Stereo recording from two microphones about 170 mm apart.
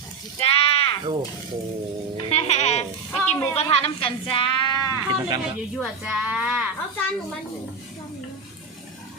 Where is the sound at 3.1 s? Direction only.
10° left (ahead or behind).